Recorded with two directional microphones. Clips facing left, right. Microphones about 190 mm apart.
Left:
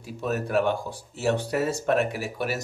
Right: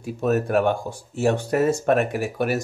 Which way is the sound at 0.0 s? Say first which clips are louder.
Right 7 dB; 50° right (ahead or behind).